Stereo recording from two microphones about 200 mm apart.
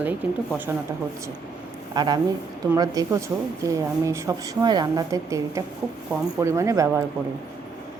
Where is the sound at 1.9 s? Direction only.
20° right (ahead or behind).